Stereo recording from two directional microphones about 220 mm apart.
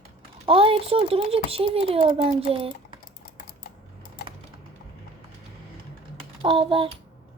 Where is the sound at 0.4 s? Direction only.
25° right (ahead or behind).